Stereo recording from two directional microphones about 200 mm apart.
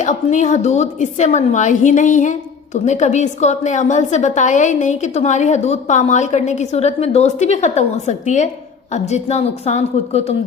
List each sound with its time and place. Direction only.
0.0 s a woman's voice: 35° left (ahead or behind)